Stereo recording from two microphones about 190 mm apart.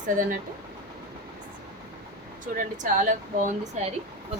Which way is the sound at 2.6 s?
45° right (ahead or behind).